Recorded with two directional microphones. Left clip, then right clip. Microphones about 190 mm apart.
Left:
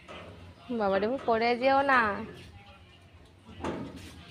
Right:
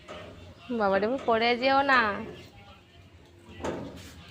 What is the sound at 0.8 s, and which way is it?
A woman's voice, 10° right (ahead or behind).